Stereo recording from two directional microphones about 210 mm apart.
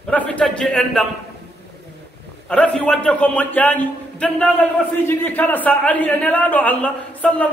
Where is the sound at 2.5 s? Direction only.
5° left (ahead or behind).